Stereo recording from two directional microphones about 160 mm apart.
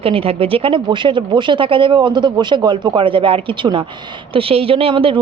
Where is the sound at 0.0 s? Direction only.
35° right (ahead or behind).